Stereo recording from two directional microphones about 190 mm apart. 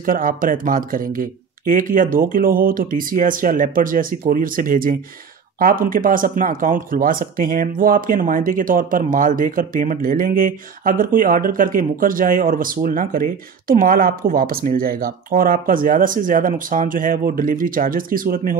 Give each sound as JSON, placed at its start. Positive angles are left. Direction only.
{"t": 0.0, "sound": "speech", "side_deg": -45}